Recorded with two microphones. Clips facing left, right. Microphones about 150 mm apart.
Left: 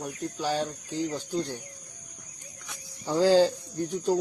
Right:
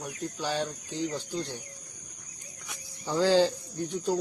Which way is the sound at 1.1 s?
40° left (ahead or behind).